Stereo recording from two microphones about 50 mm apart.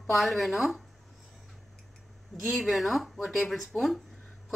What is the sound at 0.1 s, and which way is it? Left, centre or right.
Speech, centre.